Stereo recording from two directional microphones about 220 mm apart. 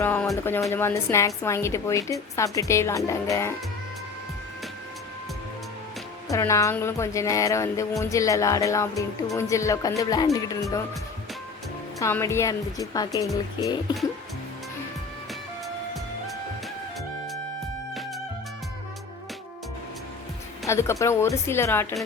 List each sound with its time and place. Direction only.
0.0 s speech: 10° left (ahead or behind)
6.3 s speech: 15° left (ahead or behind)
11.9 s speech: 10° left (ahead or behind)
20.7 s speech: 15° left (ahead or behind)